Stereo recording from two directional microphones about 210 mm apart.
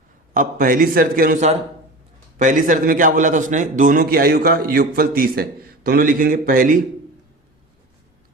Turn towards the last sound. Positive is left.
turn(degrees=-40)  # may be behind; listen again after turning